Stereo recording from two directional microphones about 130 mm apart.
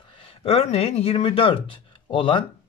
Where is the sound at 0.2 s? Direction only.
45° left (ahead or behind).